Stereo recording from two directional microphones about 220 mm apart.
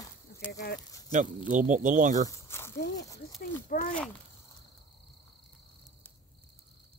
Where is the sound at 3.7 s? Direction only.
40° left (ahead or behind).